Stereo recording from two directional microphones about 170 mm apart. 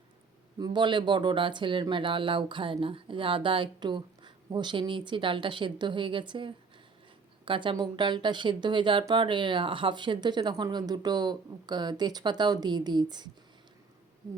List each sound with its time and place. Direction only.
0.6 s speech: 25° right (ahead or behind)